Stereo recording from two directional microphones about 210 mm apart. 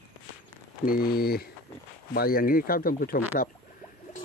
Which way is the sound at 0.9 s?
45° left (ahead or behind).